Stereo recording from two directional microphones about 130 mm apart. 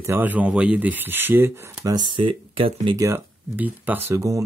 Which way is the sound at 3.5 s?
15° right (ahead or behind).